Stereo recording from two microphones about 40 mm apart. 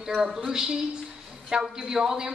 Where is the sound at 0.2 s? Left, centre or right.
Centre.